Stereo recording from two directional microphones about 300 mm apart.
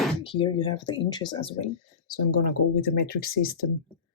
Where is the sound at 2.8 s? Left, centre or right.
Left.